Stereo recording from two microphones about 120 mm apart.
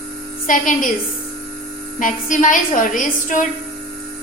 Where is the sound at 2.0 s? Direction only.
90° left.